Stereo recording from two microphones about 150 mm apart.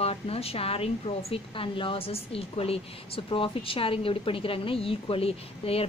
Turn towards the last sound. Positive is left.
turn(degrees=40)  # may be behind; listen again after turning